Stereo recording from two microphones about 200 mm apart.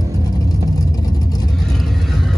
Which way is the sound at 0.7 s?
20° left (ahead or behind).